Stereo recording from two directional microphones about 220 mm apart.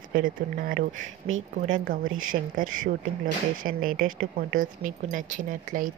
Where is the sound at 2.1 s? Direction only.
40° right (ahead or behind).